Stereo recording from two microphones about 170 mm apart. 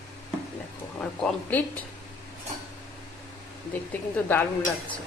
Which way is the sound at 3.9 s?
10° left (ahead or behind).